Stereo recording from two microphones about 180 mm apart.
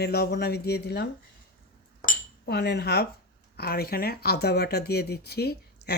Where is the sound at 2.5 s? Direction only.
65° left (ahead or behind).